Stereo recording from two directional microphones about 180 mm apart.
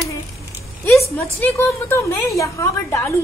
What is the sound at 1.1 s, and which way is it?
A woman's voice, 10° left (ahead or behind).